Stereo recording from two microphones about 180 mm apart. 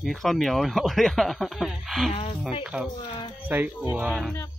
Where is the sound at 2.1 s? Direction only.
30° left (ahead or behind).